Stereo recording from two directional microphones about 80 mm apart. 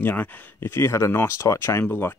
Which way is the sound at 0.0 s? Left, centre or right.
Left.